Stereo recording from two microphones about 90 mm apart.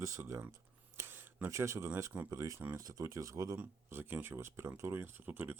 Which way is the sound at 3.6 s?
25° right (ahead or behind).